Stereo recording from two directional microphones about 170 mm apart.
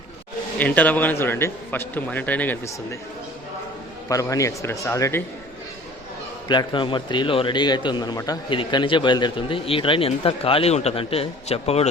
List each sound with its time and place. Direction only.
0.6 s a man's voice: 10° left (ahead or behind)
4.1 s a man's voice: 20° left (ahead or behind)
6.5 s a man's voice: 25° left (ahead or behind)